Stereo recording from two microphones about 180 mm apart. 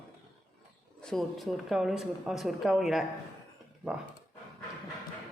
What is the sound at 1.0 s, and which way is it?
Speech, centre (ahead or behind).